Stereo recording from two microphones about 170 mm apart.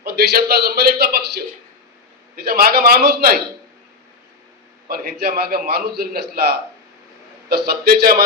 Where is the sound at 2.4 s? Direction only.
65° right (ahead or behind).